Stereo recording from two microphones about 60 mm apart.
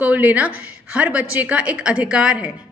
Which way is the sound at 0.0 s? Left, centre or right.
Right.